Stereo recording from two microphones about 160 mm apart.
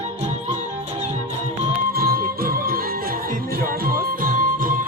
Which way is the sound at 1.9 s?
65° right (ahead or behind).